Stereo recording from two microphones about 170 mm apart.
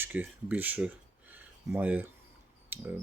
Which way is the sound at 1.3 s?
10° right (ahead or behind).